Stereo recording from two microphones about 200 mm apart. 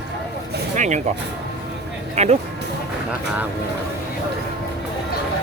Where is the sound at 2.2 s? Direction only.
35° right (ahead or behind).